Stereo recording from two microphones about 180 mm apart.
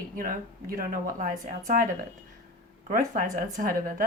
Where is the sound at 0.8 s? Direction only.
50° right (ahead or behind).